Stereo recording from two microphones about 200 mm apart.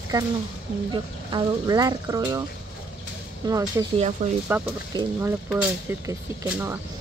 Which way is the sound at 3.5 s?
15° right (ahead or behind).